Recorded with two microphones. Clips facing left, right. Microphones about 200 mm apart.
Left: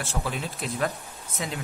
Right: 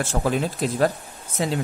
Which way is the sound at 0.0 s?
45° right (ahead or behind).